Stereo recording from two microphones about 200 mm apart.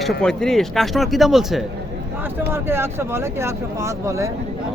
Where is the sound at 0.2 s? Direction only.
5° left (ahead or behind).